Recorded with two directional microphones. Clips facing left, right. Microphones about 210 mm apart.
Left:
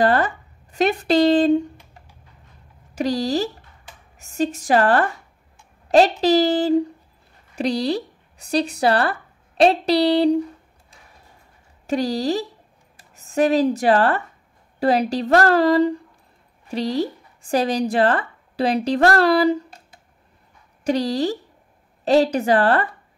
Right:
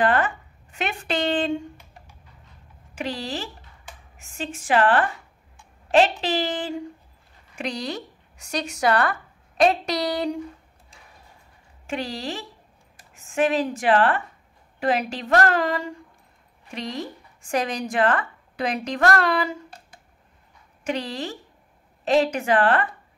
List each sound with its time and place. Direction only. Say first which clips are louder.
0.0 s a woman's voice: left 3 dB; 35° left (ahead or behind)
2.9 s speech: left 9 dB; 40° left (ahead or behind)
11.9 s speech: left 9 dB; 40° left (ahead or behind)
20.8 s speech: left 8 dB; 35° left (ahead or behind)